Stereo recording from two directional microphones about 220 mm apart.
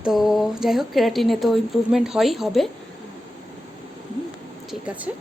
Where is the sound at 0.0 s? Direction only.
Centre (ahead or behind).